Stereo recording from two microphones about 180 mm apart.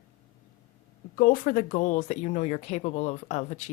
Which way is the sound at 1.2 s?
50° left (ahead or behind).